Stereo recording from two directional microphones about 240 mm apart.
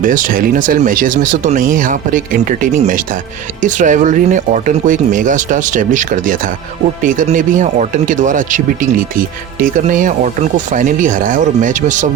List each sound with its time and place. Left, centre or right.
0.0 s speech: right